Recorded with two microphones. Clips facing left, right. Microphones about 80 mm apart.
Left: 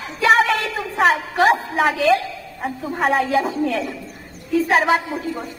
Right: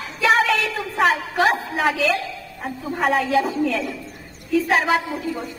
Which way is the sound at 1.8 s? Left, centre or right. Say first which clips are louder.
Left 3 dB; left.